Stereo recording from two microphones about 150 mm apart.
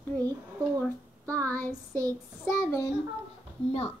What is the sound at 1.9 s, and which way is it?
Child singing, 25° right (ahead or behind).